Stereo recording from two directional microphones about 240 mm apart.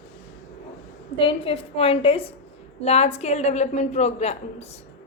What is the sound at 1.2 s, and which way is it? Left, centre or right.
A woman's voice, left.